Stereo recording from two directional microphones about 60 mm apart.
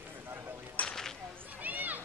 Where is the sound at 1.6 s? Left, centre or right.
Right.